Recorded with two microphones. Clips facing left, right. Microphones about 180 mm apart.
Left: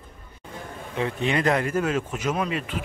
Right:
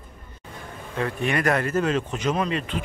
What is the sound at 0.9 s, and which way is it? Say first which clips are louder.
Speech: even; 20° left (ahead or behind).